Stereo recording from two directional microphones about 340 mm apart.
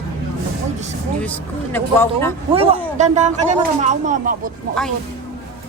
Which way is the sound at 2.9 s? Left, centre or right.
Right.